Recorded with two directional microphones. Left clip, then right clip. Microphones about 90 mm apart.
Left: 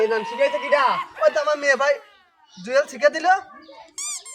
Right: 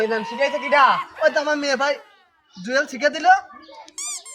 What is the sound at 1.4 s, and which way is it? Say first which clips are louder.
Speech: left 1 dB; 35° left (ahead or behind).